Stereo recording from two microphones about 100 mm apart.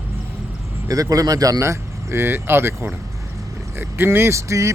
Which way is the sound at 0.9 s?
35° right (ahead or behind).